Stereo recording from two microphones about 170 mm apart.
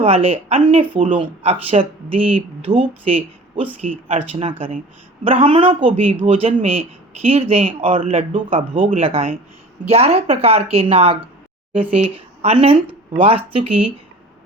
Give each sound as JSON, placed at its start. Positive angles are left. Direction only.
{"t": 0.0, "sound": "speech", "side_deg": -35}